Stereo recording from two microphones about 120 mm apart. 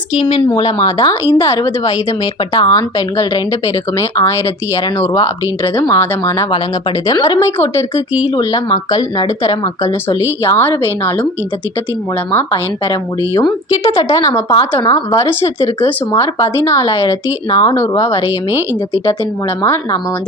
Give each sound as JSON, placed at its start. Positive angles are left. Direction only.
{"t": 0.2, "sound": "speech", "side_deg": 45}
{"t": 8.4, "sound": "speech", "side_deg": 35}
{"t": 10.7, "sound": "a woman's voice", "side_deg": 15}
{"t": 12.5, "sound": "speech", "side_deg": 30}
{"t": 17.7, "sound": "speech", "side_deg": 25}
{"t": 18.3, "sound": "speech", "side_deg": -15}
{"t": 19.6, "sound": "speech", "side_deg": 20}